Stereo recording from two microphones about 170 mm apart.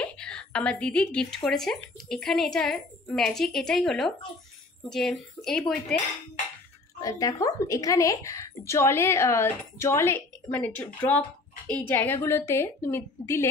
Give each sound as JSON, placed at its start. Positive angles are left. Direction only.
{"t": 0.0, "sound": "speech", "side_deg": 5}
{"t": 7.0, "sound": "speech", "side_deg": 20}